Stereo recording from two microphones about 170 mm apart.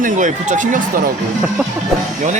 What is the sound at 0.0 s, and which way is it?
Speech, 45° right (ahead or behind).